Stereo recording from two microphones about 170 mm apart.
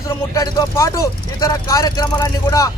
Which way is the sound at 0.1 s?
20° left (ahead or behind).